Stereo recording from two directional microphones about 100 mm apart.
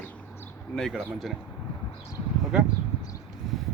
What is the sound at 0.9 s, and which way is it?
Speech, centre (ahead or behind).